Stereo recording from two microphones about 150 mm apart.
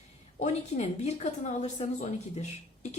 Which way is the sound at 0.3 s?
50° left (ahead or behind).